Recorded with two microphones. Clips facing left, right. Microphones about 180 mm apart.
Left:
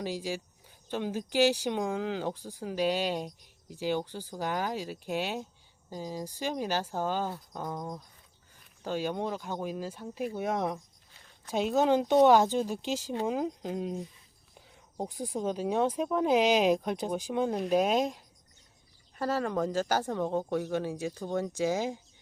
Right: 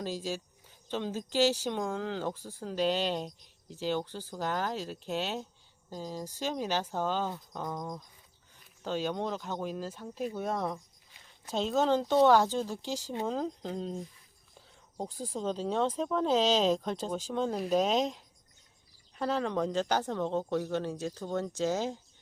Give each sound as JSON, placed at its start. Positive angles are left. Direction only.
{"t": 0.0, "sound": "speech", "side_deg": 15}